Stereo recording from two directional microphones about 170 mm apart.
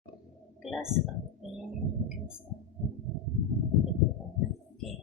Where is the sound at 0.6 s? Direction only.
5° right (ahead or behind).